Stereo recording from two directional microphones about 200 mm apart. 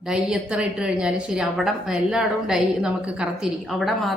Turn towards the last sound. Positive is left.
turn(degrees=0)  # may be behind; listen again after turning